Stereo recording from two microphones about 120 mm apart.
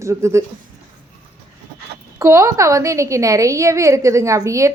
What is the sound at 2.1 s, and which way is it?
A woman's voice, 25° right (ahead or behind).